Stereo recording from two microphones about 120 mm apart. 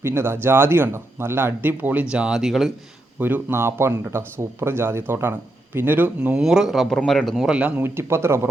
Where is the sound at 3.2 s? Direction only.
15° right (ahead or behind).